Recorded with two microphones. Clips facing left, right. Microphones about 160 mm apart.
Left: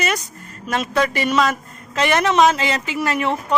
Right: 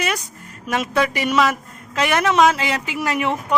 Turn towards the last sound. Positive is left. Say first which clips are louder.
# left 1 dB
turn(degrees=-10)  # may be behind; listen again after turning